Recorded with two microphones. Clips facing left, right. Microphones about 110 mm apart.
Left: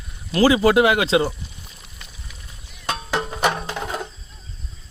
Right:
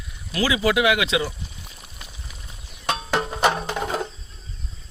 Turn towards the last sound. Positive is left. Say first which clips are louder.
# right 2 dB
turn(degrees=-10)  # may be behind; listen again after turning